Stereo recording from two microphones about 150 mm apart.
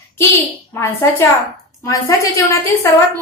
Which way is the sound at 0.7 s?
15° left (ahead or behind).